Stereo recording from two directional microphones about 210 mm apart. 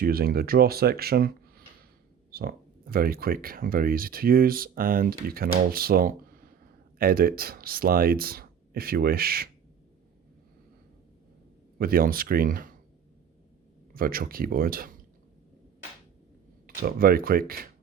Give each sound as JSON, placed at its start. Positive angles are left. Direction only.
{"t": 0.0, "sound": "speech", "side_deg": -45}
{"t": 11.8, "sound": "speech", "side_deg": -45}
{"t": 13.9, "sound": "speech", "side_deg": -45}
{"t": 16.6, "sound": "speech", "side_deg": -45}